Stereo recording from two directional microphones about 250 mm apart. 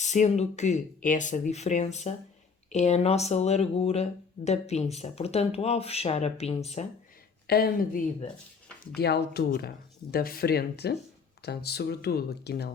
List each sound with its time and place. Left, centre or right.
0.0 s speech: left
7.4 s speech: left